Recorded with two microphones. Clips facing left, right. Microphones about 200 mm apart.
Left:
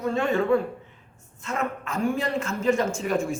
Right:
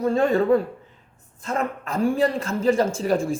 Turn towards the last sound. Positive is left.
turn(degrees=-35)  # may be behind; listen again after turning